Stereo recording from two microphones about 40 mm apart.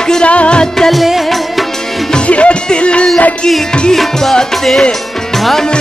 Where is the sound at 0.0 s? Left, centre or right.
Centre.